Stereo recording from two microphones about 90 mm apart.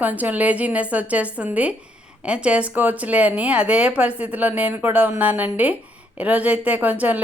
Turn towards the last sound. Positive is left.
turn(degrees=-20)  # may be behind; listen again after turning